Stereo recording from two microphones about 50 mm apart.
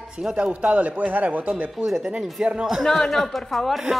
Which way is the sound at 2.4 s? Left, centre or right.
Centre.